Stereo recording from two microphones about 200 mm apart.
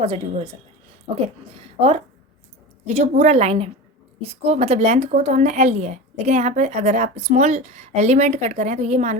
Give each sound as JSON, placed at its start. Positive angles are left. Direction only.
{"t": 0.0, "sound": "a woman's voice", "side_deg": -30}
{"t": 2.8, "sound": "a woman's voice", "side_deg": -35}